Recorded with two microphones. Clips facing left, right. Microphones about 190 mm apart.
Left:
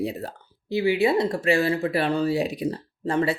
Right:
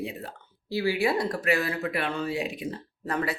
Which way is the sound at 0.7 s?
20° left (ahead or behind).